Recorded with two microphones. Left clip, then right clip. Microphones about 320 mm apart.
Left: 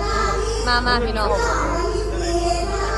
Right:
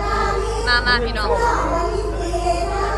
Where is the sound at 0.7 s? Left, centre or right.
Centre.